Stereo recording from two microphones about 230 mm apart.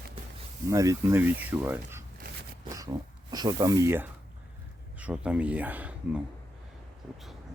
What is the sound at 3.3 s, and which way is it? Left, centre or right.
Speech, centre.